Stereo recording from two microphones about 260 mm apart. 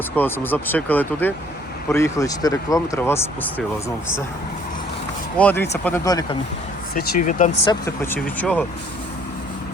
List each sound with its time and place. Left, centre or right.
0.2 s speech: centre
5.4 s speech: centre
6.9 s speech: left
7.7 s speech: centre